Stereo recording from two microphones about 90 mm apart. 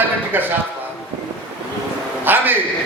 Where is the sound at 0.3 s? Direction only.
20° right (ahead or behind).